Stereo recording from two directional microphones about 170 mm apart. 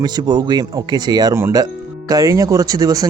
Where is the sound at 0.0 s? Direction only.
25° right (ahead or behind).